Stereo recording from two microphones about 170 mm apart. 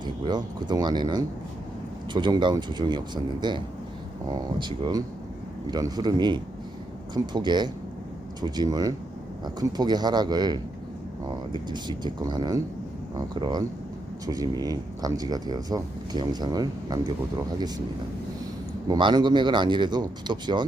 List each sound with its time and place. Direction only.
0.0 s speech: 25° right (ahead or behind)
18.9 s speech: 25° right (ahead or behind)